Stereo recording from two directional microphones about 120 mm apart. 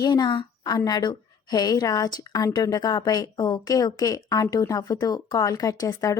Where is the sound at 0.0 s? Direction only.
35° left (ahead or behind).